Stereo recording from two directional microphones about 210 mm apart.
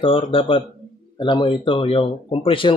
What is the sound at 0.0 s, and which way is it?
Speech, 25° left (ahead or behind).